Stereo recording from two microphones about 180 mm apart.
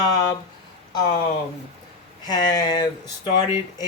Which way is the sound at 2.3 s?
25° left (ahead or behind).